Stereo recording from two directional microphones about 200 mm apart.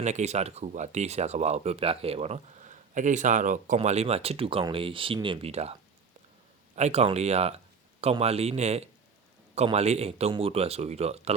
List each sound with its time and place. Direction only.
0.0 s speech: 35° right (ahead or behind)
6.7 s speech: 35° right (ahead or behind)